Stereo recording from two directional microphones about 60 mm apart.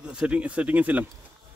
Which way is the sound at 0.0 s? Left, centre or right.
Centre.